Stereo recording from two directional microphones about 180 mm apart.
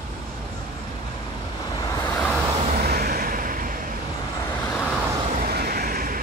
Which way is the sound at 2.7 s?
60° right (ahead or behind).